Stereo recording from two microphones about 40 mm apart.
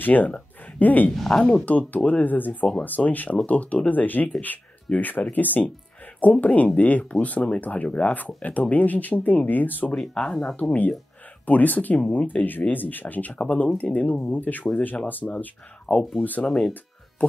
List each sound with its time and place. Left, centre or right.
0.0 s speech: left
1.1 s a woman's voice: centre
1.7 s speech: left
9.9 s speech: centre
10.5 s speech: left
13.3 s speech: left
15.9 s speech: centre
17.2 s speech: left